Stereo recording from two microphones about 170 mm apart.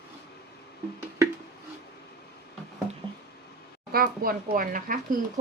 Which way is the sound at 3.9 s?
60° right (ahead or behind).